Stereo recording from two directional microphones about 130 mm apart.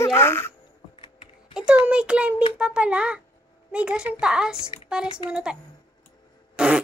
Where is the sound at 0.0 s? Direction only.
20° left (ahead or behind).